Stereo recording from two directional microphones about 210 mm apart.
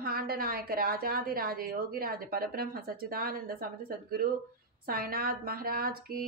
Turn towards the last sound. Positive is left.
turn(degrees=-45)  # may be behind; listen again after turning